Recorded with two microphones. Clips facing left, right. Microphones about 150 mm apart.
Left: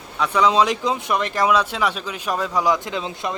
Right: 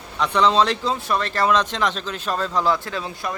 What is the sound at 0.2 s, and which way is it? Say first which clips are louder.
Speech: even; 5° left (ahead or behind).